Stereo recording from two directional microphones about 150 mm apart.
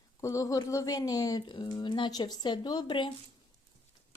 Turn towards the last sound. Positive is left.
turn(degrees=30)  # may be behind; listen again after turning